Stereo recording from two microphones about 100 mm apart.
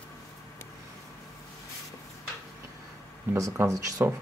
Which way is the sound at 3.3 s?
30° right (ahead or behind).